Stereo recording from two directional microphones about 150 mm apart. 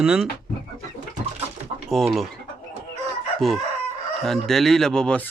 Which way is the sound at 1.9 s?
Centre (ahead or behind).